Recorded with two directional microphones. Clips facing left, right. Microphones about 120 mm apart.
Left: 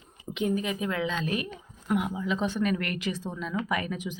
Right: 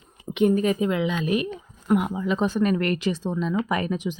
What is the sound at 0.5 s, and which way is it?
Speech, 45° right (ahead or behind).